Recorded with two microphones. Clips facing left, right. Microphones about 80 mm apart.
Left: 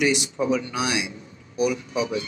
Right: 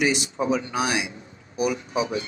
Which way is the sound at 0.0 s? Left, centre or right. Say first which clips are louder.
Left 1 dB; right.